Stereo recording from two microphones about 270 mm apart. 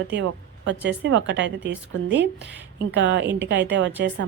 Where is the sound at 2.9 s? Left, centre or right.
Right.